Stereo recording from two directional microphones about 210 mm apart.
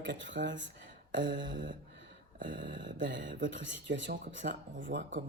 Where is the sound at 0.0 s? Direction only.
60° right (ahead or behind).